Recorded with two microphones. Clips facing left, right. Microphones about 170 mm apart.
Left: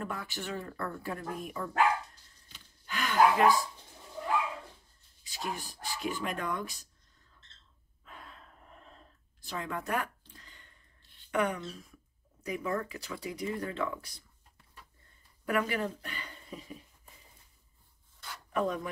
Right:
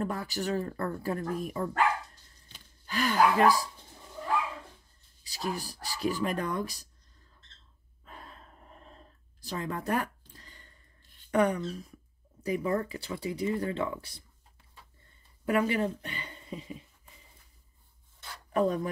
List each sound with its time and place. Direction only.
0.0 s speech: 35° right (ahead or behind)
2.4 s a sound: 35° right (ahead or behind)
5.2 s speech: 35° right (ahead or behind)
8.0 s gasp: 40° right (ahead or behind)
12.4 s speech: 30° right (ahead or behind)
15.4 s speech: 25° right (ahead or behind)
18.3 s zipper: 35° right (ahead or behind)